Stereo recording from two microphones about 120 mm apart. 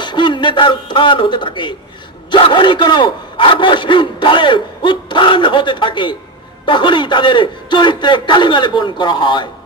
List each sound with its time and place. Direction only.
0.0 s a man's voice: 40° left (ahead or behind)